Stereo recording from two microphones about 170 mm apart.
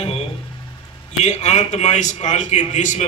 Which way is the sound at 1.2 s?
40° left (ahead or behind).